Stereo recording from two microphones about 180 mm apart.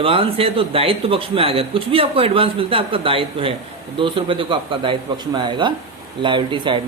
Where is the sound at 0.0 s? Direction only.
30° right (ahead or behind).